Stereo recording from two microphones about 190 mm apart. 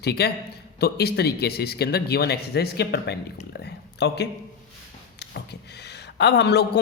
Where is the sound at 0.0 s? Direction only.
60° left (ahead or behind).